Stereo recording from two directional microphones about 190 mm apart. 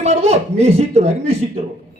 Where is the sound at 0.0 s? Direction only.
30° right (ahead or behind).